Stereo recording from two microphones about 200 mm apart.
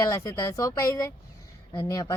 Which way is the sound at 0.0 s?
15° left (ahead or behind).